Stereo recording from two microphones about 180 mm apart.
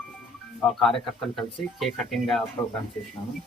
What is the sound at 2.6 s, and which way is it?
Speech, 25° left (ahead or behind).